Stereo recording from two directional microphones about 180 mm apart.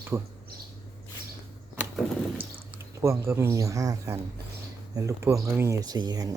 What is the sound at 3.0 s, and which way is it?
Speech, 15° right (ahead or behind).